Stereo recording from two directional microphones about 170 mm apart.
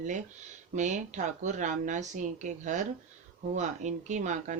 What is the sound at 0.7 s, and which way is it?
Speech, 45° right (ahead or behind).